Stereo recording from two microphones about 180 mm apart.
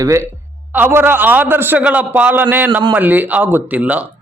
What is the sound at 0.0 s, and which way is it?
Speech, 15° right (ahead or behind).